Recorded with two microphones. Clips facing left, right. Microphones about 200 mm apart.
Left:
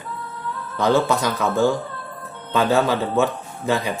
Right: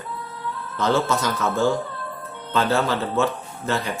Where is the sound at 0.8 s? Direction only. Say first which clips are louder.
Left 3 dB; 15° left (ahead or behind).